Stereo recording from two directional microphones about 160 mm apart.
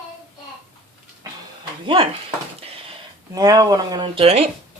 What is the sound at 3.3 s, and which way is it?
Speech, 25° right (ahead or behind).